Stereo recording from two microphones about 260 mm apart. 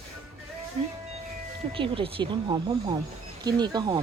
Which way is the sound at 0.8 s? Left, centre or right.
Right.